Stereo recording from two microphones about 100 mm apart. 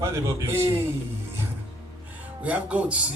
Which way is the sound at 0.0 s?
25° right (ahead or behind).